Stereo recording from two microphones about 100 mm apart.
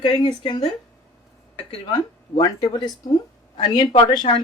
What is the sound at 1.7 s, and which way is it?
Speech, 45° left (ahead or behind).